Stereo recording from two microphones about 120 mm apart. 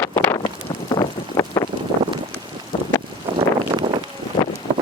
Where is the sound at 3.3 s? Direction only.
40° right (ahead or behind).